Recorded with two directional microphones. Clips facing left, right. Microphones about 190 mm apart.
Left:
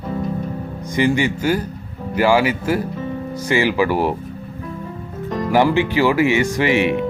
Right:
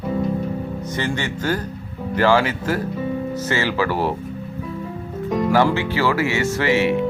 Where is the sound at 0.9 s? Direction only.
10° left (ahead or behind).